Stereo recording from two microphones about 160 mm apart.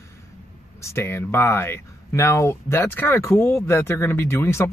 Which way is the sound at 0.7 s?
15° left (ahead or behind).